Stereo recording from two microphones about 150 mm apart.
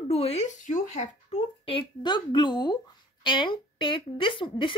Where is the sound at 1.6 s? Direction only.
35° left (ahead or behind).